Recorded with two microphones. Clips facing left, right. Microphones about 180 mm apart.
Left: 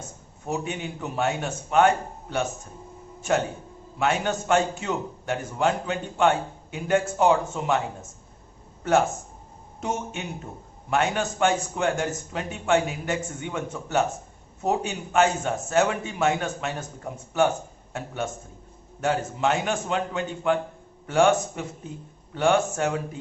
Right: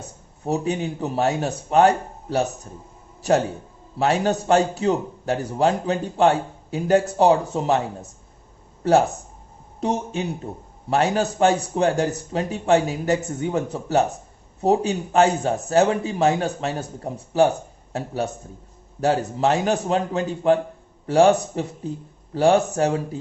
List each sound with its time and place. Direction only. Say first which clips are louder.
0.0 s a man's voice: right 6 dB; 35° right (ahead or behind)